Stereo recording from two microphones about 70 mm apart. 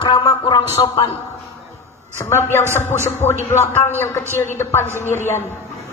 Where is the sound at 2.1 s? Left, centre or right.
Left.